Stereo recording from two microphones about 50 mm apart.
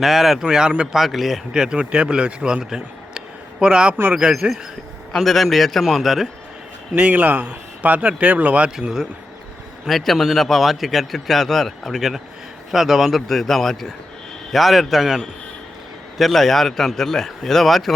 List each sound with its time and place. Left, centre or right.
0.0 s a man's voice: centre
0.4 s speech: centre
0.9 s a man's voice: centre
1.5 s a man's voice: centre
5.1 s a man's voice: centre
6.9 s speech: right
8.7 s speech: centre
9.8 s a man's voice: centre